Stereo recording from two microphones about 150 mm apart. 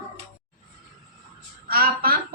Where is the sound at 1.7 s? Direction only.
80° right.